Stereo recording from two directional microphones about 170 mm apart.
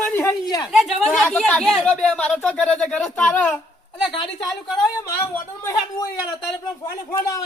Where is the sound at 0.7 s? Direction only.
Centre (ahead or behind).